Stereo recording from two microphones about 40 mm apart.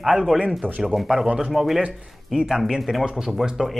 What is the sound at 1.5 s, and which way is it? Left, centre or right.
Speech, centre.